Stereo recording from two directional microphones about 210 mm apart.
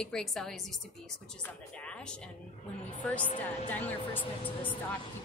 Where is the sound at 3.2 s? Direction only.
35° left (ahead or behind).